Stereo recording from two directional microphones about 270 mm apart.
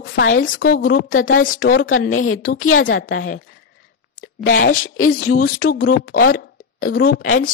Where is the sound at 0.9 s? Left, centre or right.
Left.